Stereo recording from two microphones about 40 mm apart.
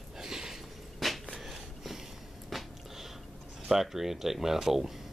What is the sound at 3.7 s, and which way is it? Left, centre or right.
Speech, centre.